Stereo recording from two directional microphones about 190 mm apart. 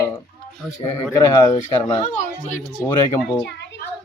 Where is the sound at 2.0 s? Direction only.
40° left (ahead or behind).